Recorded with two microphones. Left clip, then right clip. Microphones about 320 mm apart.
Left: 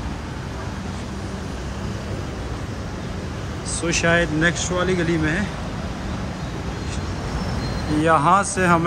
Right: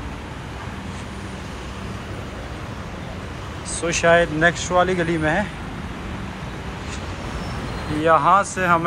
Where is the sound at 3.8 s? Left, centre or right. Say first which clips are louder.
Right 3 dB; centre.